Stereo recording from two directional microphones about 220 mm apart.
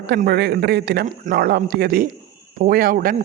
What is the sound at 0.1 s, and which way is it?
A man's voice, 45° right (ahead or behind).